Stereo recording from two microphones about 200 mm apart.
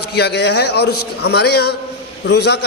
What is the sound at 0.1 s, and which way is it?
A man's voice, 55° left (ahead or behind).